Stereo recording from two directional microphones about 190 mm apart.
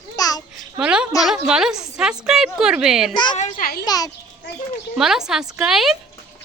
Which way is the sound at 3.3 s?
45° left (ahead or behind).